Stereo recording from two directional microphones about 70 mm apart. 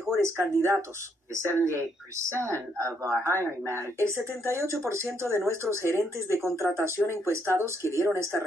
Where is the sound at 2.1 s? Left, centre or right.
Right.